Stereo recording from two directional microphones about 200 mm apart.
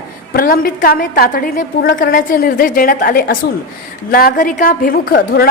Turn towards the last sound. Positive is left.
turn(degrees=50)  # may be behind; listen again after turning